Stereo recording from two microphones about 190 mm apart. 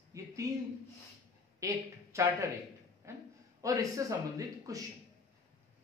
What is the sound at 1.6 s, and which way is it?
Speech, 15° right (ahead or behind).